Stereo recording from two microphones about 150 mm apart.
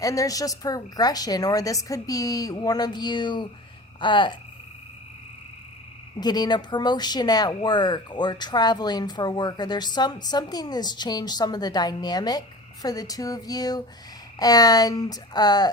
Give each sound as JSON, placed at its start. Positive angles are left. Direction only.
{"t": 0.0, "sound": "speech", "side_deg": 25}
{"t": 6.1, "sound": "speech", "side_deg": 25}